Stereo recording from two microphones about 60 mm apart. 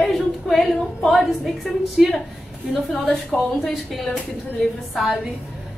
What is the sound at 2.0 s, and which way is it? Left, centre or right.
Speech, centre.